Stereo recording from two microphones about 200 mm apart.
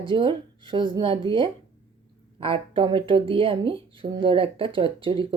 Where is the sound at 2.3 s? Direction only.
25° right (ahead or behind).